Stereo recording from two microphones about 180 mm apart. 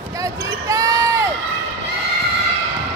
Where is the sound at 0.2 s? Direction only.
20° right (ahead or behind).